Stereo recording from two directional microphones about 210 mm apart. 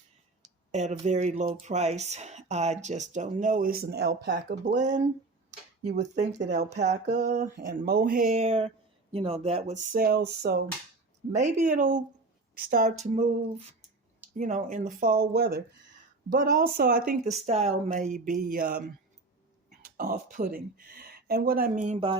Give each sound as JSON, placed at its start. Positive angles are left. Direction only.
{"t": 0.7, "sound": "speech", "side_deg": -35}
{"t": 4.6, "sound": "speech", "side_deg": -35}
{"t": 11.3, "sound": "speech", "side_deg": -35}
{"t": 17.2, "sound": "speech", "side_deg": -30}